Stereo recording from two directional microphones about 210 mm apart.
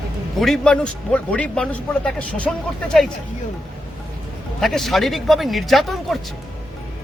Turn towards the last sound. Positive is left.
turn(degrees=0)  # may be behind; listen again after turning